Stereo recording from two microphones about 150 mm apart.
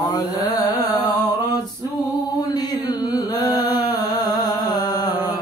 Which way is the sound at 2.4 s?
25° left (ahead or behind).